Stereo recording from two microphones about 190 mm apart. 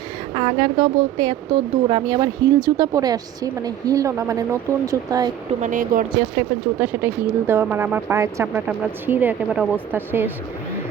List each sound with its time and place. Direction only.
0.3 s speech: 25° right (ahead or behind)
5.6 s speech: 45° right (ahead or behind)
6.3 s speech: 10° right (ahead or behind)